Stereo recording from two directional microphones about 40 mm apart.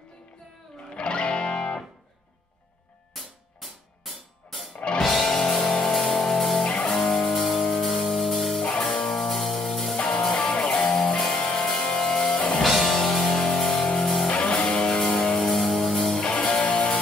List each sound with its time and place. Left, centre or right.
0.8 s music: left
3.2 s drum kit: centre
5.0 s music: centre
5.3 s music: centre
9.9 s music: left
12.6 s music: centre
14.3 s music: left
15.0 s music: centre
16.2 s music: left